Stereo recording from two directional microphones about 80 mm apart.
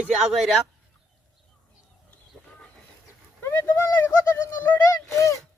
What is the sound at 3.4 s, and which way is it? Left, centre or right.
Speech, left.